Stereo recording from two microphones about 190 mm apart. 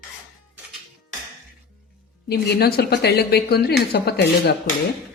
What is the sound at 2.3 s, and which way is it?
A woman's voice, 60° left (ahead or behind).